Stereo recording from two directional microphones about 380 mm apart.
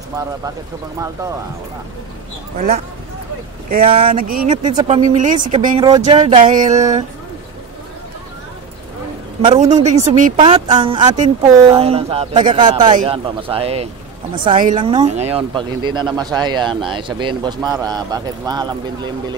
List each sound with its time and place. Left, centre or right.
2.5 s speech: right
9.4 s a woman's voice: centre